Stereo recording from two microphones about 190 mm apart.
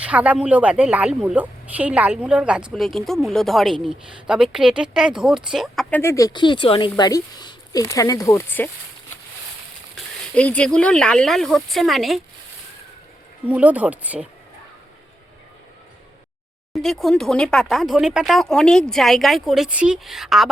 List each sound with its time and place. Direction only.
0.0 s a woman's voice: 5° right (ahead or behind)
6.0 s speech: 15° left (ahead or behind)
10.3 s a woman's voice: 5° left (ahead or behind)
13.5 s speech: 10° right (ahead or behind)
16.7 s a woman's voice: centre (ahead or behind)